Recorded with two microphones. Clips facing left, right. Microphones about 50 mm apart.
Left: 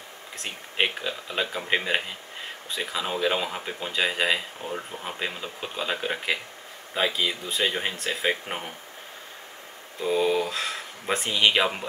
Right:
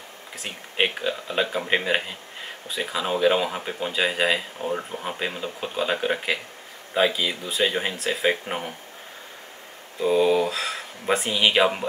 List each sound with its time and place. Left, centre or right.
0.4 s speech: centre
4.6 s speech: centre
9.9 s speech: centre